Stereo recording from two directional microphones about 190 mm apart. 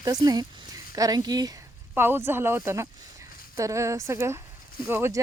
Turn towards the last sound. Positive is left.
turn(degrees=-15)  # may be behind; listen again after turning